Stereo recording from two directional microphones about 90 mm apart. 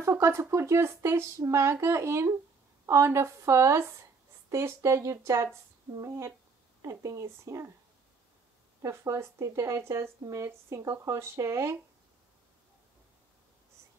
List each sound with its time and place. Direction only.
0.0 s speech: 35° right (ahead or behind)
8.8 s speech: 35° right (ahead or behind)